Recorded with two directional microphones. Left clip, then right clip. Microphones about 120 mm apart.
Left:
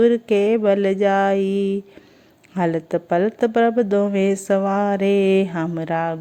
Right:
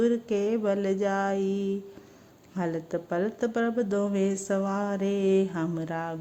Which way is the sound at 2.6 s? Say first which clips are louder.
Left 10 dB; 30° left (ahead or behind).